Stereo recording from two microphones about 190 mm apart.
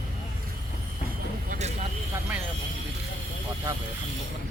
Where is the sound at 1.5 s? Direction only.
35° right (ahead or behind).